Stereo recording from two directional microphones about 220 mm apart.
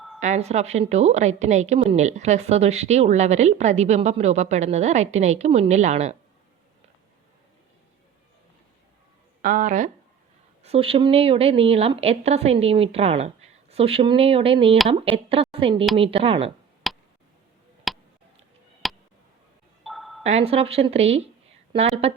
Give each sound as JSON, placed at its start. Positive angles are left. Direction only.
{"t": 0.2, "sound": "a woman's voice", "side_deg": -30}
{"t": 9.4, "sound": "a woman's voice", "side_deg": -35}
{"t": 16.9, "sound": "tick", "side_deg": 0}
{"t": 17.9, "sound": "a sound", "side_deg": 0}
{"t": 19.8, "sound": "glockenspiel", "side_deg": 0}
{"t": 20.2, "sound": "a woman's voice", "side_deg": -30}